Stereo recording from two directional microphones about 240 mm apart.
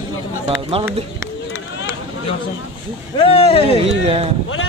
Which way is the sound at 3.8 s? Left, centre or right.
Right.